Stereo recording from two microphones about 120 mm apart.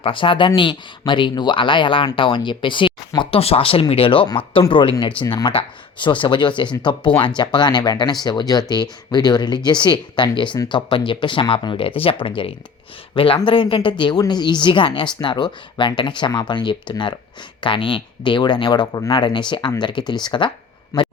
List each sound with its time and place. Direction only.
0.0 s speech: 45° left (ahead or behind)
20.9 s speech: 25° left (ahead or behind)